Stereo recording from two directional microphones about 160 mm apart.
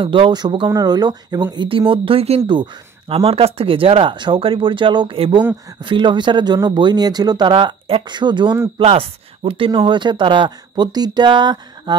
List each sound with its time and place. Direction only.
0.0 s speech: 30° right (ahead or behind)